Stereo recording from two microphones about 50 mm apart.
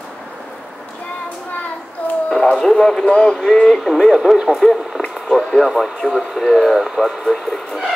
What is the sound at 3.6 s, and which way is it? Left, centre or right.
Speech, centre.